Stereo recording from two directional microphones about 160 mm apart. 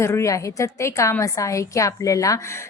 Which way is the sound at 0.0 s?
15° left (ahead or behind).